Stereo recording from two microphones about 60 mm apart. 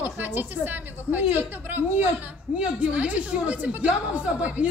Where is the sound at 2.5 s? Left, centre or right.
Centre.